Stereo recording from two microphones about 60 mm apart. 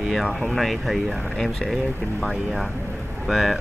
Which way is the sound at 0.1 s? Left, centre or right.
Centre.